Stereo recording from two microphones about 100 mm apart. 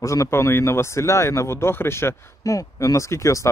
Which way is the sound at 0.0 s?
30° left (ahead or behind).